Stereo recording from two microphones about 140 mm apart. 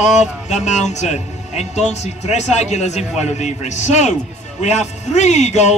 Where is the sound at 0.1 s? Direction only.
55° left (ahead or behind).